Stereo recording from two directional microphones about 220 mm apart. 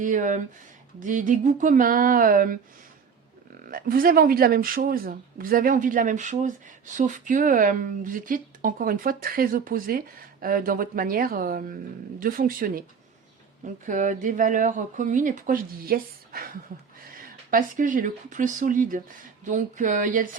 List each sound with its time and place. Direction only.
0.0 s speech: 35° right (ahead or behind)
3.7 s speech: 40° right (ahead or behind)
13.8 s speech: 35° right (ahead or behind)